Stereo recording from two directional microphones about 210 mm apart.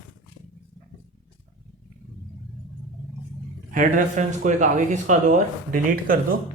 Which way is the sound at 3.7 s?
40° right (ahead or behind).